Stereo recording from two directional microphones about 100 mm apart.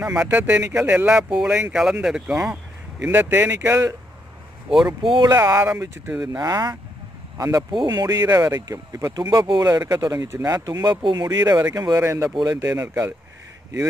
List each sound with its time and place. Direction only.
0.0 s speech: 10° right (ahead or behind)
3.1 s speech: 20° right (ahead or behind)
4.6 s speech: 5° right (ahead or behind)
5.0 s speech: 50° right (ahead or behind)
5.4 s speech: 25° right (ahead or behind)
6.3 s speech: 40° right (ahead or behind)
7.7 s speech: 45° right (ahead or behind)
12.0 s speech: 30° right (ahead or behind)
12.4 s speech: 40° right (ahead or behind)
12.7 s speech: 25° right (ahead or behind)